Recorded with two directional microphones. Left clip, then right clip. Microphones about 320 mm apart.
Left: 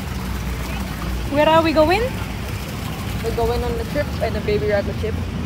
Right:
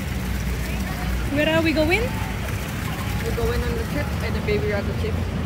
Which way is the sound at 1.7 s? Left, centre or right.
Centre.